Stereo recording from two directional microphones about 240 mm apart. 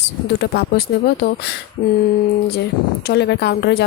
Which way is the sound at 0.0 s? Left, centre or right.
Left.